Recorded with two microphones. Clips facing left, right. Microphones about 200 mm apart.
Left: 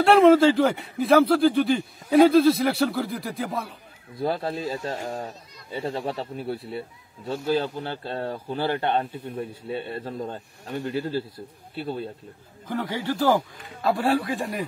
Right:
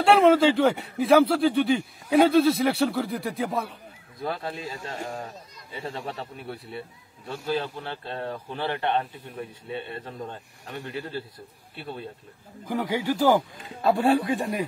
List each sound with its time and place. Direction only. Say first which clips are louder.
0.0 s speech: left 3 dB; centre (ahead or behind)
4.2 s speech: left 5 dB; 35° left (ahead or behind)
12.6 s speech: right 2 dB; 15° right (ahead or behind)